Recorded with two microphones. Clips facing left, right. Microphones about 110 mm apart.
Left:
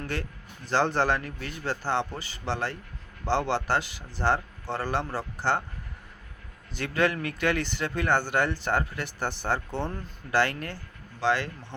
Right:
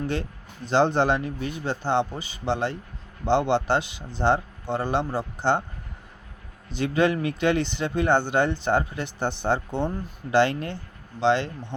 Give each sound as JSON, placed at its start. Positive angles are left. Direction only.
{"t": 0.0, "sound": "speech", "side_deg": -20}
{"t": 6.7, "sound": "speech", "side_deg": -20}